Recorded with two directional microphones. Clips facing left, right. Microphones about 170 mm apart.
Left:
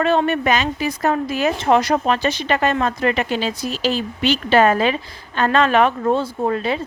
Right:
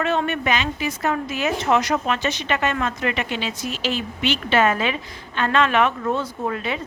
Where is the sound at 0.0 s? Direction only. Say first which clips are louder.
Left 5 dB; 35° left (ahead or behind).